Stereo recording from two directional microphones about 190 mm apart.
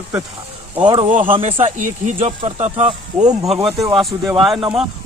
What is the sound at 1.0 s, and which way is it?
Speech, 40° right (ahead or behind).